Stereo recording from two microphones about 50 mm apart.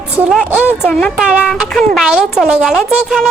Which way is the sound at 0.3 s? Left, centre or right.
Centre.